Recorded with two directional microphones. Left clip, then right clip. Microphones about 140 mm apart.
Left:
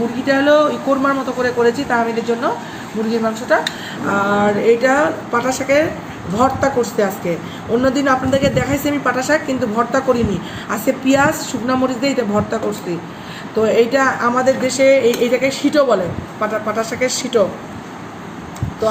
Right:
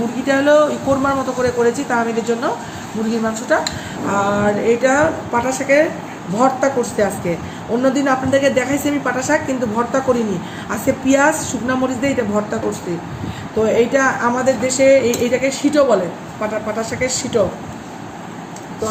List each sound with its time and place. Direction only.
0.3 s speech: 5° right (ahead or behind)
3.5 s speech: centre (ahead or behind)
4.1 s a woman's voice: 25° left (ahead or behind)
13.6 s a woman's voice: 20° left (ahead or behind)